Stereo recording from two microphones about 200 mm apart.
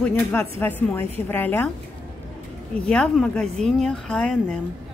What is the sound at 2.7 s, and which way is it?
A woman's voice, 5° left (ahead or behind).